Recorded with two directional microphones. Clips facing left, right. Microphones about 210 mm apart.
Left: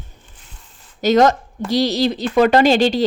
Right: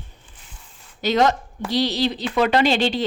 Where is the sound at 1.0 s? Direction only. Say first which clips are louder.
Left 5 dB; 45° left (ahead or behind).